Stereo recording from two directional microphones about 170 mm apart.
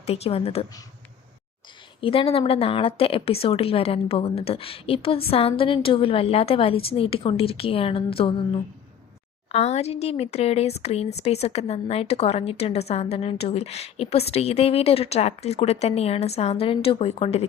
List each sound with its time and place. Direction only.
0.0 s speech: 35° left (ahead or behind)
2.0 s speech: 35° left (ahead or behind)
9.5 s speech: 40° left (ahead or behind)